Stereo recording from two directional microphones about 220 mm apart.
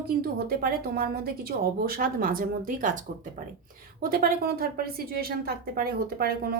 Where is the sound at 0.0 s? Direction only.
45° right (ahead or behind).